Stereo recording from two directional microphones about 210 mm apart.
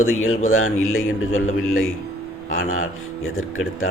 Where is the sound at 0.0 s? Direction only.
70° left (ahead or behind).